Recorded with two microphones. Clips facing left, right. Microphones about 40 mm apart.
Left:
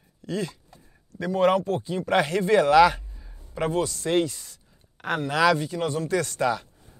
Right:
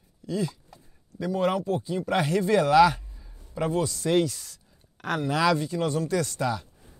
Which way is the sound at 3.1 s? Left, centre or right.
Left.